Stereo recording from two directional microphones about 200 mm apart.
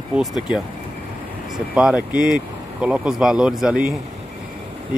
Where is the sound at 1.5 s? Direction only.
5° right (ahead or behind).